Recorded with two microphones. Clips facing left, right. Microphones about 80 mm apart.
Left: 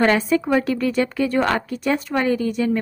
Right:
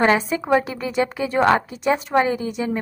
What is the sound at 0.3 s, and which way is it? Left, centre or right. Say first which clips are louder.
A woman's voice: left 1 dB; right.